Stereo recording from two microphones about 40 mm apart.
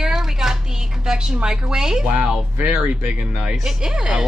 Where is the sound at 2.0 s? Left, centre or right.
Right.